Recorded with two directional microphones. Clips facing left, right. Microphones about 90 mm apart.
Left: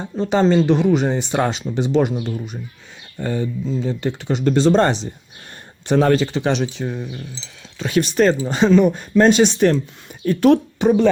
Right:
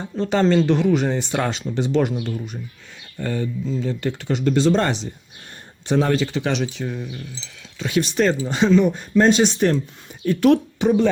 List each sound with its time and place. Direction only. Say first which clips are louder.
0.0 s speech: left 2 dB; 20° left (ahead or behind)
3.2 s speech: left 2 dB; 20° left (ahead or behind)
4.4 s speech: left 3 dB; 35° left (ahead or behind)
5.8 s speech: left 4 dB; 55° left (ahead or behind)
6.2 s speech: left 3 dB; 30° left (ahead or behind); by 9.8 s 85° left
10.2 s speech: left 2 dB; 35° left (ahead or behind)